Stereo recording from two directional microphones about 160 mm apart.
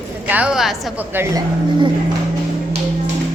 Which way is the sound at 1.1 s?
15° right (ahead or behind).